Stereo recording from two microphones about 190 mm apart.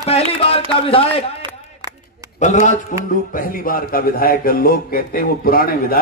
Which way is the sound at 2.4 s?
40° left (ahead or behind).